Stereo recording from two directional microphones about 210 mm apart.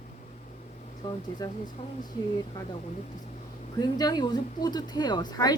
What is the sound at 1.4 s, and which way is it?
Speech, 20° left (ahead or behind).